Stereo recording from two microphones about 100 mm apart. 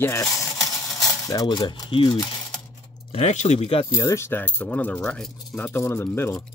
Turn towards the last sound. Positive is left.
turn(degrees=30)  # may be behind; listen again after turning